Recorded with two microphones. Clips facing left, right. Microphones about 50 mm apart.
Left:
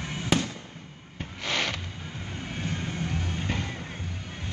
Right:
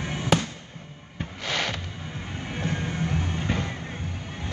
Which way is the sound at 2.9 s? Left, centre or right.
Right.